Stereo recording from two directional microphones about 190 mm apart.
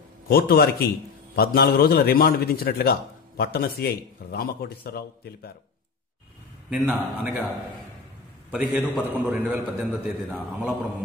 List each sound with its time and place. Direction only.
0.3 s a man's voice: 55° left (ahead or behind)
6.7 s a man's voice: 5° right (ahead or behind)